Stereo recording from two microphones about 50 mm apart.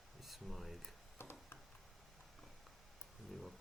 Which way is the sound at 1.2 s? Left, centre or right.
Left.